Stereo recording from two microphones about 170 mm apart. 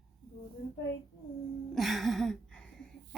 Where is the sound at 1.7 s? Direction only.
Centre (ahead or behind).